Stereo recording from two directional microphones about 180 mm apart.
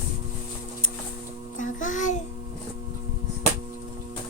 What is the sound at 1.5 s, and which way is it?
Music, 45° left (ahead or behind).